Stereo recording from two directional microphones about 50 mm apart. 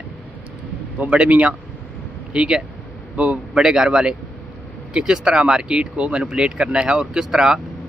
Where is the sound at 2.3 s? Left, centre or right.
Centre.